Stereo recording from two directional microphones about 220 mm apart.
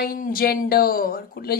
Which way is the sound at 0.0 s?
40° left (ahead or behind).